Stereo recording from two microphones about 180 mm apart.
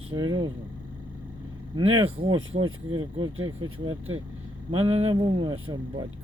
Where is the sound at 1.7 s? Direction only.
30° right (ahead or behind).